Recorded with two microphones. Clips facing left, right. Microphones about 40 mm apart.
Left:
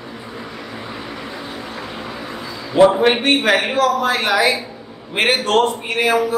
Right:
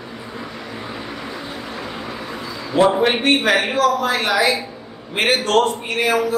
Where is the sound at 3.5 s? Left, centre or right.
Centre.